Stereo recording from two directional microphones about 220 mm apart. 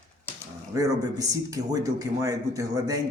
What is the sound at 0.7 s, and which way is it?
A man's voice, 15° right (ahead or behind).